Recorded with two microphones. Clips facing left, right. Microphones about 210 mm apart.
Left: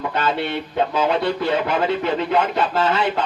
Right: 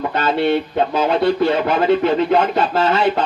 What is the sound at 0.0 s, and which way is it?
Speech, 40° right (ahead or behind).